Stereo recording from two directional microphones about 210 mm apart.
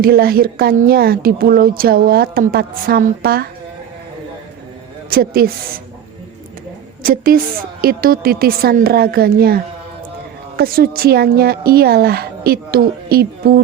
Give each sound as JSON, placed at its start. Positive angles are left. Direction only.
{"t": 0.0, "sound": "speech", "side_deg": -45}
{"t": 5.1, "sound": "speech", "side_deg": -45}
{"t": 7.0, "sound": "speech", "side_deg": -45}
{"t": 10.6, "sound": "speech", "side_deg": -45}